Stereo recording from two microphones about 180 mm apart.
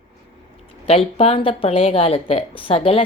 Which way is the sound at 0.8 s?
30° left (ahead or behind).